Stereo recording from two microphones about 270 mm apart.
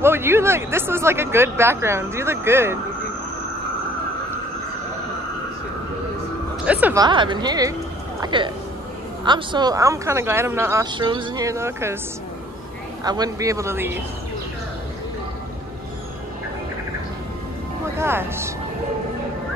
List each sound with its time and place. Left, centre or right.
0.0 s speech: centre
6.6 s speech: centre
8.2 s a sound: centre
9.2 s speech: centre
13.0 s speech: centre
17.9 s speech: centre